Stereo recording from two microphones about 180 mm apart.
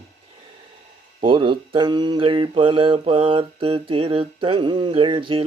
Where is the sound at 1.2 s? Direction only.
30° right (ahead or behind).